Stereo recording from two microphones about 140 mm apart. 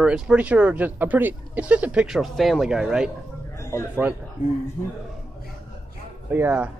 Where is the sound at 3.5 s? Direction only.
20° left (ahead or behind).